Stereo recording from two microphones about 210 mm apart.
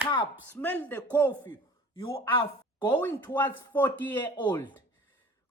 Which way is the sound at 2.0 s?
25° left (ahead or behind).